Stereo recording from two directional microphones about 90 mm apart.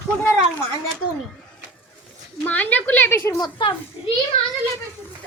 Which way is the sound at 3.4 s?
65° left (ahead or behind).